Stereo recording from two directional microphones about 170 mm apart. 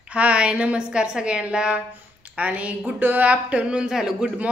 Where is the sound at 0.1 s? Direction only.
5° right (ahead or behind).